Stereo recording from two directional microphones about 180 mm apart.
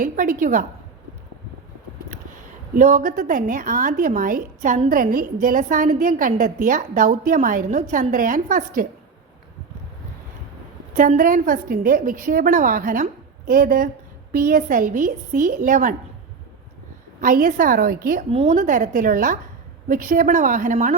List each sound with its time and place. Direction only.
0.0 s a woman's voice: 50° right (ahead or behind)
2.7 s a woman's voice: 45° right (ahead or behind)
10.9 s a woman's voice: 45° right (ahead or behind)
17.2 s a woman's voice: 50° right (ahead or behind)
18.3 s a woman's voice: 35° right (ahead or behind)